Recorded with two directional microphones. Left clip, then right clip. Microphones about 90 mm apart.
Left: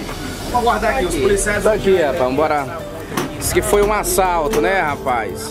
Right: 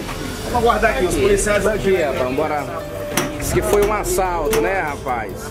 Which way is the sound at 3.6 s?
40° left (ahead or behind).